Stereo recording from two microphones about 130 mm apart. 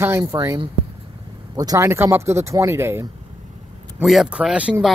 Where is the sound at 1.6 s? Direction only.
25° right (ahead or behind).